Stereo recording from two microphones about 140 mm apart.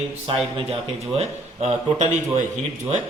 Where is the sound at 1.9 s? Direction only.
60° right (ahead or behind).